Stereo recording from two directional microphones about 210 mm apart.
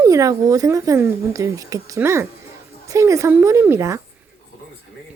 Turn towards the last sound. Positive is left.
turn(degrees=-15)  # may be behind; listen again after turning